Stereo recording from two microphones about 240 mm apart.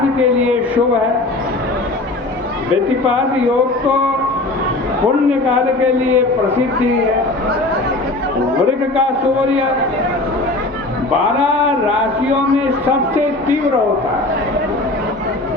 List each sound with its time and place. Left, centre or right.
0.2 s a sound: centre
5.5 s a man's voice: centre
12.8 s a man's voice: centre